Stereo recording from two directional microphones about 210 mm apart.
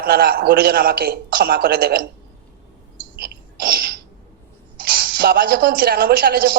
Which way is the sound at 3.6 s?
45° right (ahead or behind).